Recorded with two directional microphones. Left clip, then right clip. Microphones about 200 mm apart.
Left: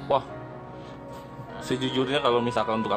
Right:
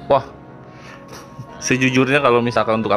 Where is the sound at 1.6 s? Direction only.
25° right (ahead or behind).